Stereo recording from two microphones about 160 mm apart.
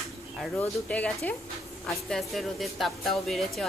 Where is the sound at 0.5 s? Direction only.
10° left (ahead or behind).